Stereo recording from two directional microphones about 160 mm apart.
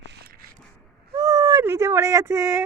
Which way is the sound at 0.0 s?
85° right.